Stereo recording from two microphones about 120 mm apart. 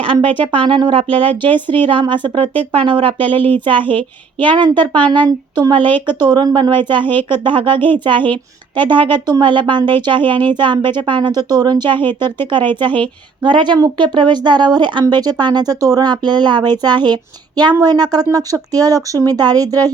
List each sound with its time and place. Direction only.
0.0 s speech: 50° right (ahead or behind)
3.8 s a woman's voice: 15° left (ahead or behind)
4.4 s speech: 40° right (ahead or behind)
4.9 s a woman's voice: 10° left (ahead or behind)
5.5 s speech: 40° right (ahead or behind)